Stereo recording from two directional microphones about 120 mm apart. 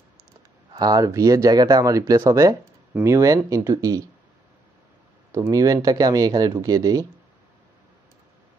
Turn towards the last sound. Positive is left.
turn(degrees=-30)  # may be behind; listen again after turning